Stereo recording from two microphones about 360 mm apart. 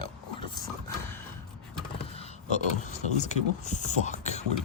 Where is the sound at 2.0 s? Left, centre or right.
Centre.